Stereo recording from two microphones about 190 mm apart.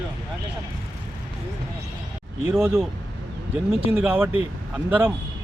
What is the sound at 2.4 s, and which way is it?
Speech, 10° right (ahead or behind).